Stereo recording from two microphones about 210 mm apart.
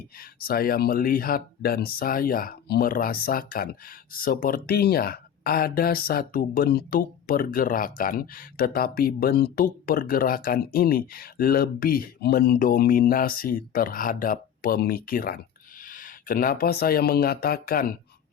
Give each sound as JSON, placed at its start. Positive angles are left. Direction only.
{"t": 0.2, "sound": "speech", "side_deg": 45}